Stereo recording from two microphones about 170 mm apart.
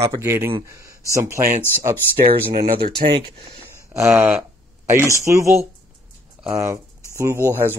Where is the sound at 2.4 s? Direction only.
60° right (ahead or behind).